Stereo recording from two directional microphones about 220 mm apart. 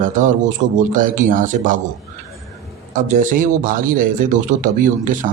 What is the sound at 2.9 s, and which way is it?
Speech, 35° right (ahead or behind).